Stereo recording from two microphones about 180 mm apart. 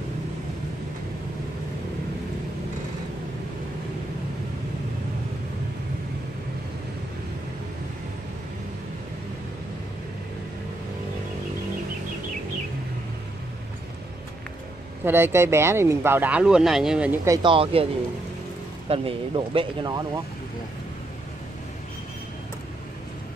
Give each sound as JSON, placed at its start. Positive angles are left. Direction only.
{"t": 15.0, "sound": "speech", "side_deg": -10}
{"t": 18.9, "sound": "speech", "side_deg": -30}